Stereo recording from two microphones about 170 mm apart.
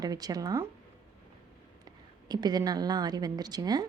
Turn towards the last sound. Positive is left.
turn(degrees=-25)  # may be behind; listen again after turning